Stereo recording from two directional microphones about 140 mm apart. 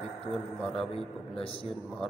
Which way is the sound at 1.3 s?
40° left (ahead or behind).